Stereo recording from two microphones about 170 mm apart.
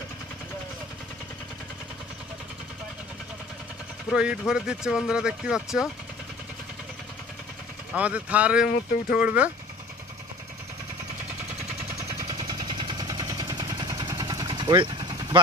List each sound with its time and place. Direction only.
4.1 s speech: 5° right (ahead or behind)
7.9 s speech: 10° right (ahead or behind)
12.0 s a sound: 25° right (ahead or behind)